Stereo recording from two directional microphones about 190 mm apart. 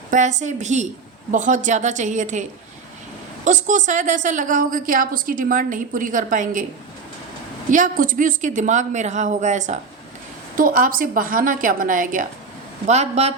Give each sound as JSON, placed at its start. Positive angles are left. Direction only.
{"t": 0.1, "sound": "a woman's voice", "side_deg": -40}
{"t": 3.4, "sound": "a woman's voice", "side_deg": -40}
{"t": 7.7, "sound": "a woman's voice", "side_deg": -45}